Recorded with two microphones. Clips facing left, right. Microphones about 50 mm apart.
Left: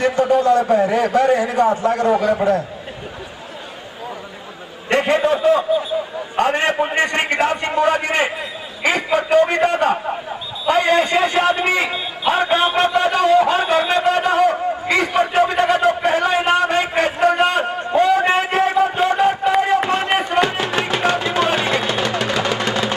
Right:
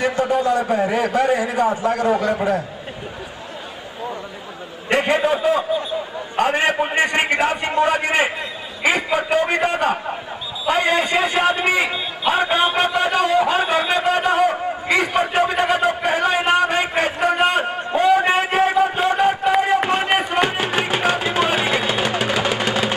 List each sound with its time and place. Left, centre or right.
0.0 s a man's voice: centre
2.1 s a man's voice: centre
4.8 s a man's voice: centre
6.4 s a man's voice: centre
14.0 s a sound: centre
20.3 s chopping: centre